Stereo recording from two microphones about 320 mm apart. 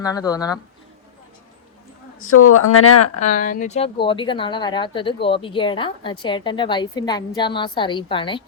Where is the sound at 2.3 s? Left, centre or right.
Left.